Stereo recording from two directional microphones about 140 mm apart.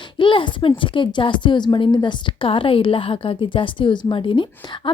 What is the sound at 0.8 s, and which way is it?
A woman's voice, 35° left (ahead or behind).